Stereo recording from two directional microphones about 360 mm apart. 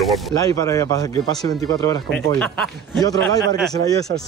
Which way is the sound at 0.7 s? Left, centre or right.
Centre.